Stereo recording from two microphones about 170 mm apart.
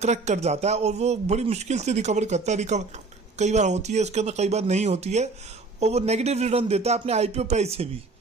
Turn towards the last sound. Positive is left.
turn(degrees=-40)  # may be behind; listen again after turning